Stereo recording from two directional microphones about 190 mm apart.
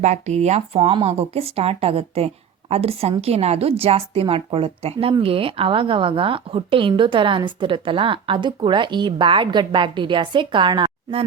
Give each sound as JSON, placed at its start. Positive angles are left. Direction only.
{"t": 0.0, "sound": "speech", "side_deg": -35}